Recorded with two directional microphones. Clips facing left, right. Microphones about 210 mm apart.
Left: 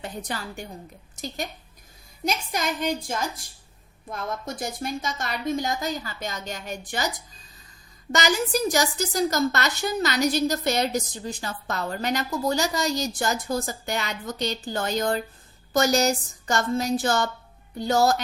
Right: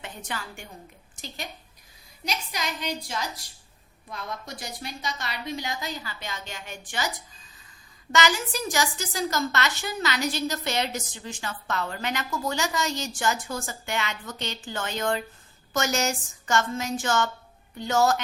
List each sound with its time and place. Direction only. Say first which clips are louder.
0.0 s a woman's voice: left 4 dB; 35° left (ahead or behind)
8.1 s a woman's voice: left 2 dB; 40° left (ahead or behind)